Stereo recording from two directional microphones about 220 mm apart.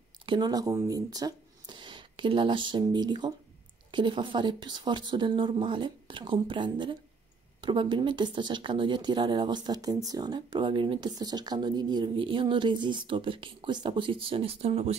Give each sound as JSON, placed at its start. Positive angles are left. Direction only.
{"t": 0.3, "sound": "speech", "side_deg": -20}